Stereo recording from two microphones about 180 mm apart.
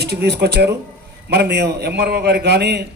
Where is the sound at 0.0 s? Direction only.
60° right (ahead or behind).